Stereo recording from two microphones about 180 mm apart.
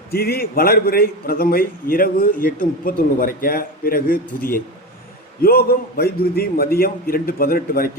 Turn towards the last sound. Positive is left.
turn(degrees=55)  # may be behind; listen again after turning